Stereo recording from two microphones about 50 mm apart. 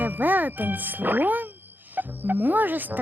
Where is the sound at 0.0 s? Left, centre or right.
Right.